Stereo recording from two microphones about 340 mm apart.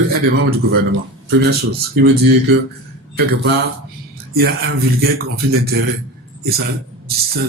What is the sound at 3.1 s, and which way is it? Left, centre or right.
A man's voice, right.